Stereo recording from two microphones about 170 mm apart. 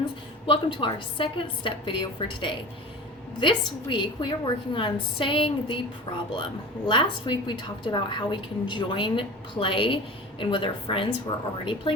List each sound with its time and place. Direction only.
0.4 s a woman's voice: 30° left (ahead or behind)